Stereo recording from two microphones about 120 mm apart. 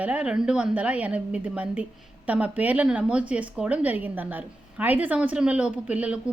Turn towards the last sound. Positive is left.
turn(degrees=-10)  # may be behind; listen again after turning